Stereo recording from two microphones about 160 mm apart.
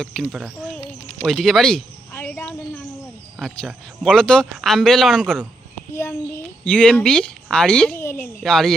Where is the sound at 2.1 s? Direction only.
15° left (ahead or behind).